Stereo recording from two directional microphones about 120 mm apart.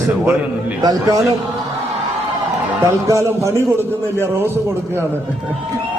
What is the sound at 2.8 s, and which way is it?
Speech, 25° right (ahead or behind).